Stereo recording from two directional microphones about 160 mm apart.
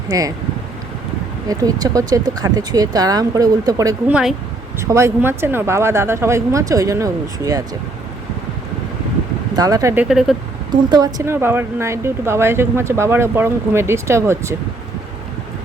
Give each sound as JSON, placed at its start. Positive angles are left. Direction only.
{"t": 0.1, "sound": "speech", "side_deg": -20}
{"t": 1.5, "sound": "speech", "side_deg": -20}
{"t": 4.1, "sound": "speech", "side_deg": -5}
{"t": 4.8, "sound": "speech", "side_deg": -15}
{"t": 9.6, "sound": "speech", "side_deg": -20}
{"t": 10.7, "sound": "speech", "side_deg": -25}
{"t": 11.3, "sound": "speech", "side_deg": -15}